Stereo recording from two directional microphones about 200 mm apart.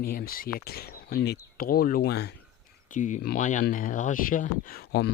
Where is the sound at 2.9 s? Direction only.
40° left (ahead or behind).